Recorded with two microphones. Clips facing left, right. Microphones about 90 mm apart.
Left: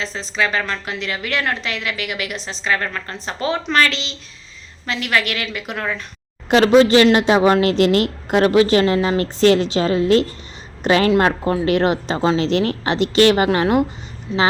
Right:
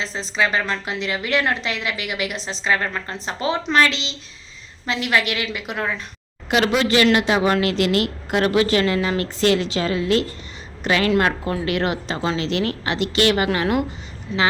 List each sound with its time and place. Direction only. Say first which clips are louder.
0.0 s a woman's voice: even; 25° right (ahead or behind)
6.5 s a woman's voice: left 7 dB; 30° left (ahead or behind)